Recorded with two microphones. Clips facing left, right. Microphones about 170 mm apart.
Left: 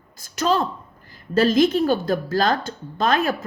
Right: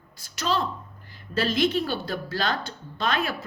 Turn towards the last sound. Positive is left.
turn(degrees=45)  # may be behind; listen again after turning